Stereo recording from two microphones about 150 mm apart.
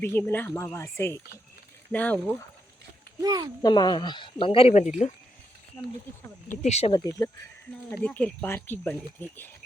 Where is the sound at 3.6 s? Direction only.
25° left (ahead or behind); by 4.9 s 45° left (ahead or behind).